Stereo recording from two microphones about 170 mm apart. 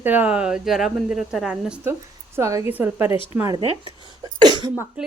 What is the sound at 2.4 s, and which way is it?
Speech, 15° right (ahead or behind).